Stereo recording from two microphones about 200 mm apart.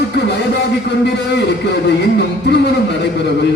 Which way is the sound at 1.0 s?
60° left (ahead or behind).